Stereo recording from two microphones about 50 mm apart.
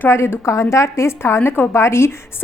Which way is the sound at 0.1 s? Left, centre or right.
Left.